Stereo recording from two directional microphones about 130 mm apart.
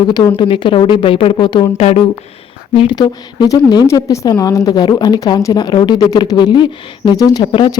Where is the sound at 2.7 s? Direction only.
35° left (ahead or behind).